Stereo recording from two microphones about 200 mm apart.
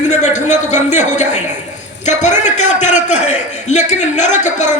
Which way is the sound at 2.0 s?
35° left (ahead or behind).